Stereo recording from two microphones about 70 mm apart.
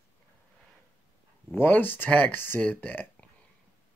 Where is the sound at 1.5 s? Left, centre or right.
Left.